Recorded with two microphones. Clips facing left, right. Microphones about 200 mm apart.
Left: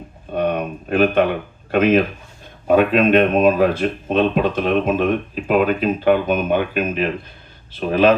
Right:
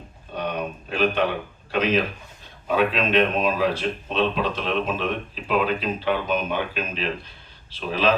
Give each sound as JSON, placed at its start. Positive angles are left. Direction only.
{"t": 0.3, "sound": "speech", "side_deg": 50}